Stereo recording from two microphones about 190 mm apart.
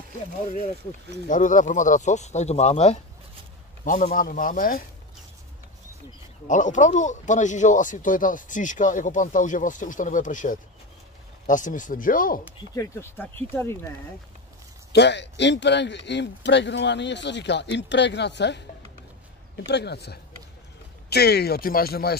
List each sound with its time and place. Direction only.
1.2 s speech: 45° left (ahead or behind)
3.8 s speech: 45° left (ahead or behind)
6.4 s speech: 40° left (ahead or behind)
12.7 s speech: 15° left (ahead or behind)
14.9 s speech: 65° left (ahead or behind)